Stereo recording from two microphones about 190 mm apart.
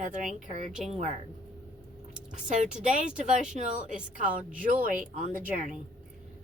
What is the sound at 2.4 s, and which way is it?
A woman's voice, 40° right (ahead or behind).